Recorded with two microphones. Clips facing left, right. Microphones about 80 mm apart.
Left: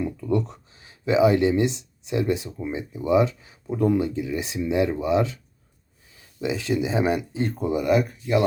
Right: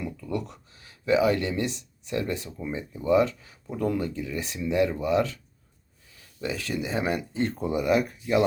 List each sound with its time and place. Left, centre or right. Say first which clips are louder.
0.0 s speech: left 7 dB; left
6.4 s speech: left 6 dB; centre